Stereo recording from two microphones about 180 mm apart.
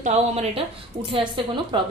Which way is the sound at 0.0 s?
35° right (ahead or behind).